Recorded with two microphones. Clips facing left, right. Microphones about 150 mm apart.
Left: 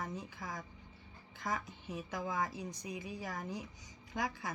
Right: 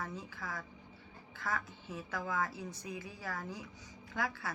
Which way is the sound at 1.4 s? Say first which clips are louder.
Even; 15° left (ahead or behind).